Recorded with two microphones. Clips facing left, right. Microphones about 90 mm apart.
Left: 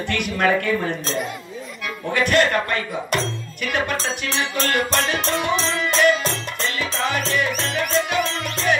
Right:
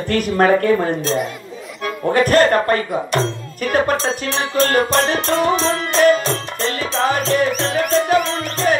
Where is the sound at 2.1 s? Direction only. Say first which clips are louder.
Right 5 dB; 40° right (ahead or behind).